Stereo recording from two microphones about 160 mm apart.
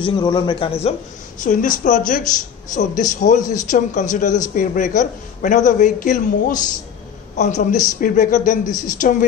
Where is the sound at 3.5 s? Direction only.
50° left (ahead or behind).